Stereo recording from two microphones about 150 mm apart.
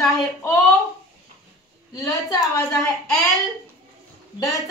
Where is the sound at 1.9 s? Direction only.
25° left (ahead or behind).